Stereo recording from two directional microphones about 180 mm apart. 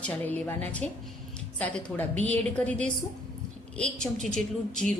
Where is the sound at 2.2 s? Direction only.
10° left (ahead or behind).